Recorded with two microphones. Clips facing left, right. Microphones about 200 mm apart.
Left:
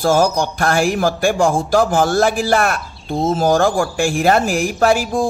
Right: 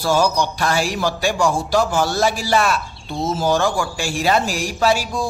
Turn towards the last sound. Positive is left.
turn(degrees=50)  # may be behind; listen again after turning